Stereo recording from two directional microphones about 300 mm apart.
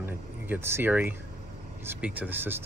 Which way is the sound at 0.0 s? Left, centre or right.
Centre.